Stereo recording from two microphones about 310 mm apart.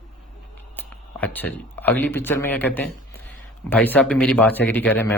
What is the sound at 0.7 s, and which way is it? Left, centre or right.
Speech, centre.